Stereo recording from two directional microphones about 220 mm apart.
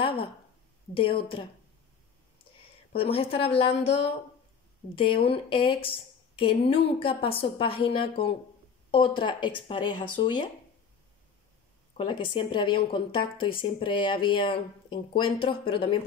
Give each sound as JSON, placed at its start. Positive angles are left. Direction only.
{"t": 0.0, "sound": "a woman's voice", "side_deg": 25}
{"t": 2.9, "sound": "speech", "side_deg": 25}
{"t": 5.2, "sound": "speech", "side_deg": 25}
{"t": 12.0, "sound": "speech", "side_deg": 20}